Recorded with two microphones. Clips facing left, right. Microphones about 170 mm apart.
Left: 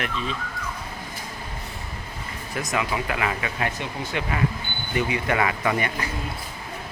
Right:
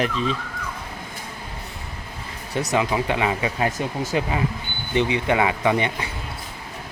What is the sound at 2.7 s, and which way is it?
Speech, 30° right (ahead or behind).